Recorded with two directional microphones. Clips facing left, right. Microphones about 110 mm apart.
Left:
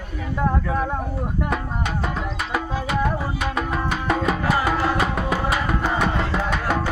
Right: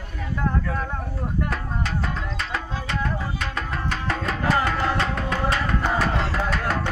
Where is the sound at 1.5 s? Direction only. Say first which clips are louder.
Left 3 dB; 5° left (ahead or behind).